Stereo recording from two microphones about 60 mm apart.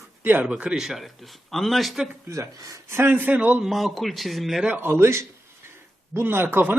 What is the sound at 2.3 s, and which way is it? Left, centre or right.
Speech, right.